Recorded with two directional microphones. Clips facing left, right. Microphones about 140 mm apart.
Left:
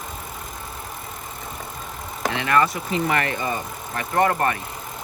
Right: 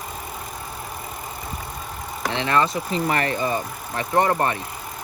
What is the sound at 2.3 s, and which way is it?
Speech, 25° right (ahead or behind).